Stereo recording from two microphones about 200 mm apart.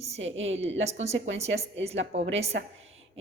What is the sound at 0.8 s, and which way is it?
Speech, 35° right (ahead or behind).